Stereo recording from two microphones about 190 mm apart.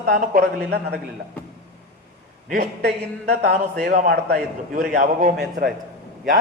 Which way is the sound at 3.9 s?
45° right (ahead or behind).